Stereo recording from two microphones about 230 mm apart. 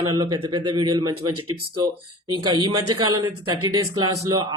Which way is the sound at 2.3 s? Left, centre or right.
Centre.